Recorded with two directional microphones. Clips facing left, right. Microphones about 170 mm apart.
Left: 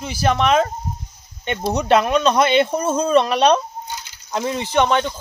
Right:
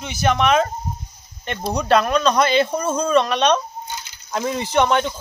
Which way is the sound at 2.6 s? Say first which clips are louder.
Left 2 dB; 30° left (ahead or behind).